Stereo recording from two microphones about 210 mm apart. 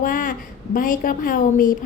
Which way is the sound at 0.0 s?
40° left (ahead or behind).